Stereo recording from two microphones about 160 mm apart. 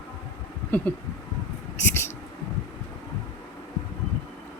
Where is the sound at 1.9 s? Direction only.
15° left (ahead or behind).